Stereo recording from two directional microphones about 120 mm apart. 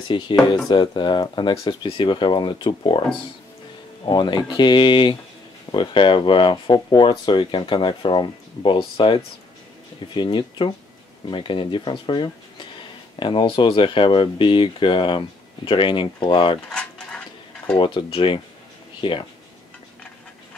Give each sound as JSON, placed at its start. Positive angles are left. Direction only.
{"t": 0.1, "sound": "speech", "side_deg": 40}
{"t": 4.0, "sound": "speech", "side_deg": 40}
{"t": 16.6, "sound": "mechanisms", "side_deg": 10}
{"t": 17.7, "sound": "speech", "side_deg": 45}